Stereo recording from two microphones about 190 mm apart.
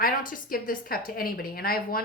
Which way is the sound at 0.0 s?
45° left (ahead or behind).